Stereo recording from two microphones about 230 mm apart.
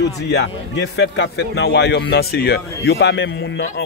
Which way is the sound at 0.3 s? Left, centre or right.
Left.